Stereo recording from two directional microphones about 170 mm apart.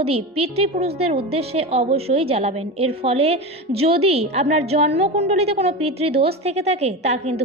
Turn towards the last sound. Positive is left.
turn(degrees=-40)  # may be behind; listen again after turning